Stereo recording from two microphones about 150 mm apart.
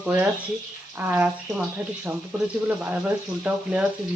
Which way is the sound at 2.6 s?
10° right (ahead or behind).